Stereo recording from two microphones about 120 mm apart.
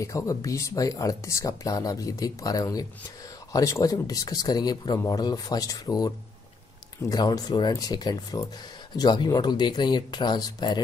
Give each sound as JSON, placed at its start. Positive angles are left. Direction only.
{"t": 0.0, "sound": "speech", "side_deg": 25}